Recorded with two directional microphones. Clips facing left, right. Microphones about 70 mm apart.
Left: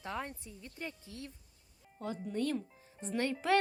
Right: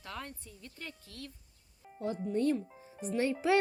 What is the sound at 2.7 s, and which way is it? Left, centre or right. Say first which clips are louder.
Music: right 5 dB; centre.